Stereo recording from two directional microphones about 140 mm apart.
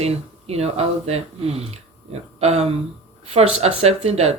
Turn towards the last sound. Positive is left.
turn(degrees=-50)  # may be behind; listen again after turning